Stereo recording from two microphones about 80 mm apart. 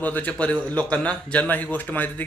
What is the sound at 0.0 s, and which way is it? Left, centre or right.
A man's voice, left.